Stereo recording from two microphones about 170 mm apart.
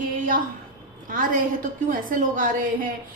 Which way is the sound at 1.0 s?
50° right (ahead or behind).